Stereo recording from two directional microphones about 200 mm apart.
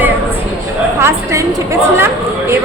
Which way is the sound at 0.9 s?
15° right (ahead or behind).